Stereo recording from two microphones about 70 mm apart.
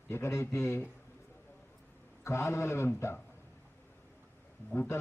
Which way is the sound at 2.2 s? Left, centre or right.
Left.